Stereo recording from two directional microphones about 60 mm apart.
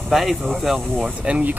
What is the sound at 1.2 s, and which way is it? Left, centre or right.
Speech, centre.